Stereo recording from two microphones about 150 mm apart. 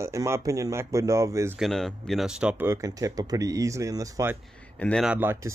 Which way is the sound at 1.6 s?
Centre (ahead or behind).